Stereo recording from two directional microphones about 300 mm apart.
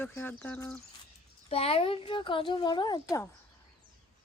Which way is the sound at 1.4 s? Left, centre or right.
Centre.